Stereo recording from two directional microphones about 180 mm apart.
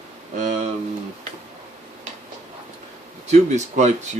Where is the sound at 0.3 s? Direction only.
40° right (ahead or behind).